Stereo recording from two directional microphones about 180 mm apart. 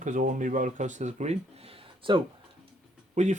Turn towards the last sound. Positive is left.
turn(degrees=-40)  # may be behind; listen again after turning